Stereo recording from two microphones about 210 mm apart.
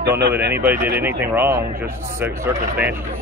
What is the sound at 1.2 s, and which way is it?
Speech, 10° right (ahead or behind).